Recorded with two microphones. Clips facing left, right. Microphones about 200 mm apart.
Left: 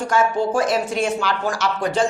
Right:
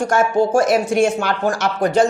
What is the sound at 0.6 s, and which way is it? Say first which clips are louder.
Speech: right 5 dB; 70° right (ahead or behind).